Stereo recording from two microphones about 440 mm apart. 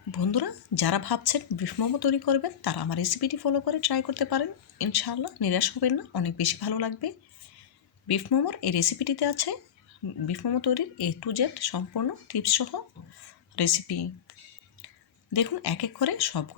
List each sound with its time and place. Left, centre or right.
0.1 s a woman's voice: left
15.3 s a woman's voice: left